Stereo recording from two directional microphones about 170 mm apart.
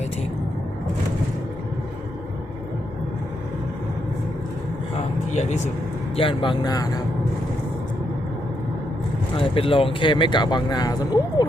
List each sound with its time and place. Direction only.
5.3 s speech: 40° left (ahead or behind)
6.1 s speech: 30° left (ahead or behind)
9.4 s speech: 30° left (ahead or behind)